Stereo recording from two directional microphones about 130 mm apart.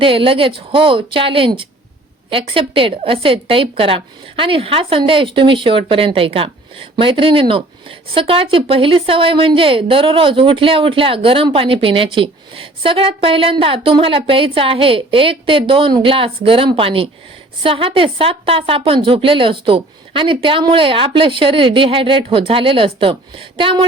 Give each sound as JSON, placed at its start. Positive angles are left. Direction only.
{"t": 0.0, "sound": "a woman's voice", "side_deg": -45}